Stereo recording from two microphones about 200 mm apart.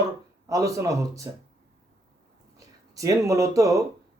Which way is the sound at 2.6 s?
15° right (ahead or behind).